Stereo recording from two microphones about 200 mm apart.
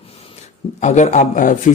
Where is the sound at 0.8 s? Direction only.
35° left (ahead or behind).